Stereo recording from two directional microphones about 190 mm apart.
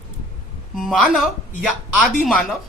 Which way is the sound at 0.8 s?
Centre (ahead or behind).